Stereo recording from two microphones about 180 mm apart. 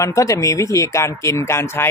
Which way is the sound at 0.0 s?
15° left (ahead or behind).